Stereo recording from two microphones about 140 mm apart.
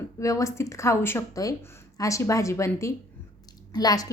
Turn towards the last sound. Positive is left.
turn(degrees=25)  # may be behind; listen again after turning